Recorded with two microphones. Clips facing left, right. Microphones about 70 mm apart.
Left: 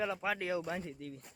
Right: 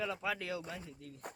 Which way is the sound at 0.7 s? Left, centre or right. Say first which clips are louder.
Left 7 dB; left.